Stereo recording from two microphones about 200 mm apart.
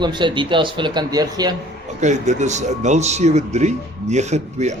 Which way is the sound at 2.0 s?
35° right (ahead or behind).